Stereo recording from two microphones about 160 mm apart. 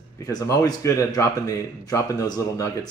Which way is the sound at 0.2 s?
20° left (ahead or behind).